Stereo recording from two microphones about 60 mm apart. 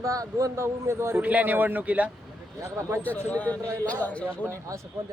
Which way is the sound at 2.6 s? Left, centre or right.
Right.